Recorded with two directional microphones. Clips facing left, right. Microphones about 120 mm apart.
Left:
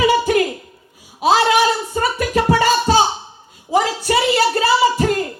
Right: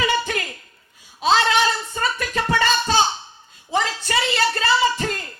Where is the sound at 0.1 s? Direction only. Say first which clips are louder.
Left 8 dB; 20° left (ahead or behind).